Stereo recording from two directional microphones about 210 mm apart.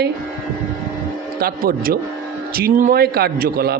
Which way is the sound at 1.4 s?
45° right (ahead or behind).